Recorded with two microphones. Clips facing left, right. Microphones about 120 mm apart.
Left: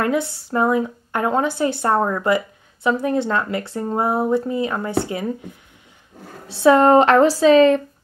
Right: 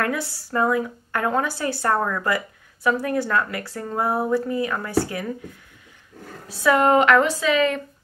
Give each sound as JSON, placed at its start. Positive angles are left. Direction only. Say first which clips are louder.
{"t": 0.0, "sound": "a woman's voice", "louder": "left 5 dB", "side_deg": 20}